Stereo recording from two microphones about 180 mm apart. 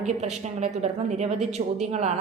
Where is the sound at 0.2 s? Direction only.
40° right (ahead or behind).